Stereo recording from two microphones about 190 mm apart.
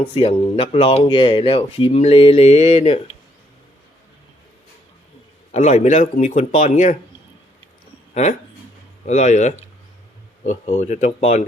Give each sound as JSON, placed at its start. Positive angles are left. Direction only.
{"t": 0.1, "sound": "speech", "side_deg": 30}
{"t": 5.5, "sound": "speech", "side_deg": 35}
{"t": 9.0, "sound": "speech", "side_deg": 40}